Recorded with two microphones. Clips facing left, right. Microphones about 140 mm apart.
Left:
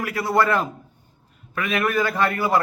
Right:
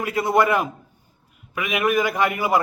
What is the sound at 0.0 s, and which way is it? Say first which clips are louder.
A man's voice: right 2 dB; 20° right (ahead or behind).